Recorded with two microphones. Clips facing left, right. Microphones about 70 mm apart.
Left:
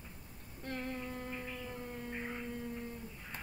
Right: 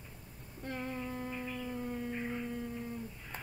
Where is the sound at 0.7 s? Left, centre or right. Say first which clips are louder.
Right 1 dB; centre.